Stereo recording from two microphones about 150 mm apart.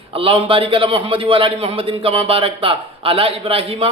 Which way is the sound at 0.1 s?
35° right (ahead or behind).